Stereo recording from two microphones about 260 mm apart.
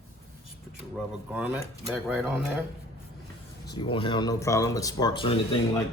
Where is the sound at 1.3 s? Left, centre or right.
Centre.